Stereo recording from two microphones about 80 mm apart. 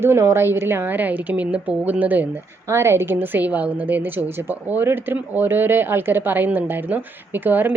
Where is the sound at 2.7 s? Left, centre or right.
Right.